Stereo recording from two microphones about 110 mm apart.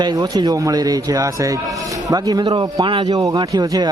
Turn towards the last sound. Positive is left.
turn(degrees=-40)  # may be behind; listen again after turning